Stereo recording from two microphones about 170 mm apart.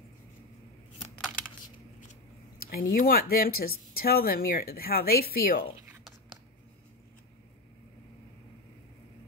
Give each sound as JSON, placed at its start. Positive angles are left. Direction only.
{"t": 2.7, "sound": "speech", "side_deg": 60}